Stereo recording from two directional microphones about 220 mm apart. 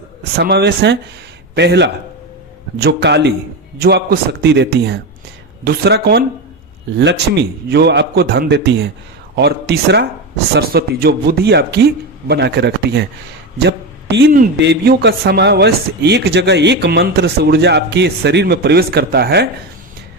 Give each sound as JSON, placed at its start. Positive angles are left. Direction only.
{"t": 0.3, "sound": "a man's voice", "side_deg": -50}